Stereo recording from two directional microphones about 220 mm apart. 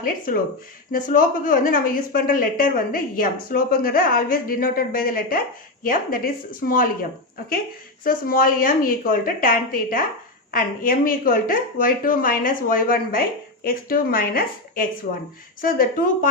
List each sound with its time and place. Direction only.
0.3 s speech: 40° left (ahead or behind)
8.0 s speech: 40° left (ahead or behind)